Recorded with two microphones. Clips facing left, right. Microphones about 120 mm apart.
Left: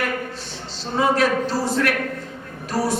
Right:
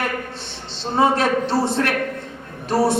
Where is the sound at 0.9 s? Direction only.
25° right (ahead or behind).